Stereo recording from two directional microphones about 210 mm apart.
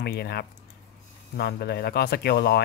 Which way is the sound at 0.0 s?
50° left (ahead or behind).